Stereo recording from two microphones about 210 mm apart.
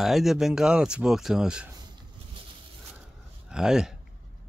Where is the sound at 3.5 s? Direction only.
5° right (ahead or behind).